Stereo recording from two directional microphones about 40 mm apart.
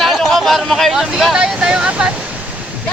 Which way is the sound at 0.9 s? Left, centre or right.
Centre.